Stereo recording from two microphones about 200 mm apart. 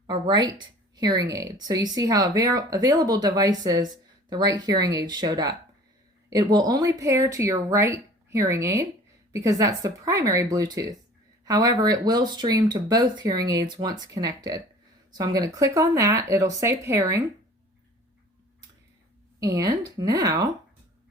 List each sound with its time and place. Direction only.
0.1 s speech: 20° right (ahead or behind)
19.4 s speech: 15° right (ahead or behind)